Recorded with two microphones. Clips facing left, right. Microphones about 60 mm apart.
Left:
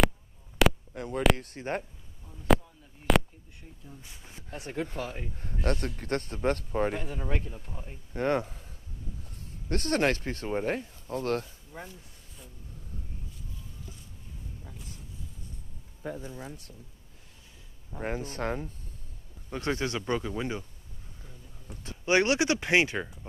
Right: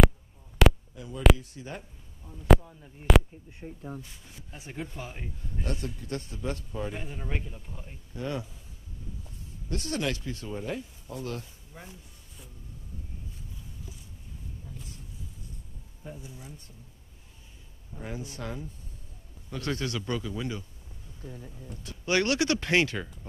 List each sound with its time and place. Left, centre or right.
0.6 s a sound: centre
0.9 s speech: left
2.2 s speech: centre
3.6 s speech: right
4.2 s speech: left
4.5 s speech: left
5.1 s speech: left
8.1 s speech: left
9.7 s speech: left
11.4 s speech: left
16.2 s speech: left
17.9 s speech: left
19.5 s speech: left
21.8 s speech: left